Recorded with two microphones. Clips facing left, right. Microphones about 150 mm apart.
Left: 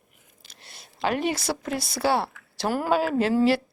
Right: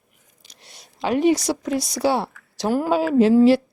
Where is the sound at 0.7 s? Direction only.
5° left (ahead or behind).